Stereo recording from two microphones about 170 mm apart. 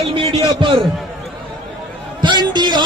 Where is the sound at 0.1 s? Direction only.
30° right (ahead or behind).